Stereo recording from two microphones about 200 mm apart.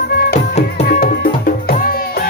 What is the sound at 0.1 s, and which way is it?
Music, 50° left (ahead or behind).